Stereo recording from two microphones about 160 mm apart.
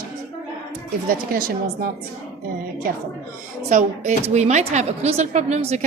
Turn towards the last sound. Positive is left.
turn(degrees=-45)  # may be behind; listen again after turning